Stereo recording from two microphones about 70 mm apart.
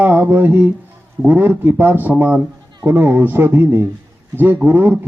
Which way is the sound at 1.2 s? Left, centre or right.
Right.